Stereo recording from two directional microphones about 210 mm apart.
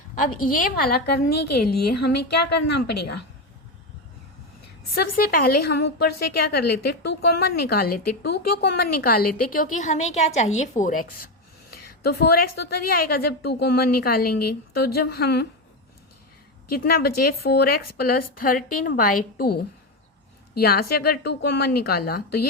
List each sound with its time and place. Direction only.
0.2 s a woman's voice: 40° left (ahead or behind)
5.1 s a woman's voice: 45° left (ahead or behind)
16.7 s a woman's voice: 45° left (ahead or behind)